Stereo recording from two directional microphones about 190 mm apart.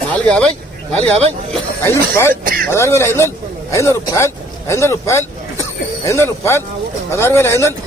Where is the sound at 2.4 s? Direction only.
50° right (ahead or behind).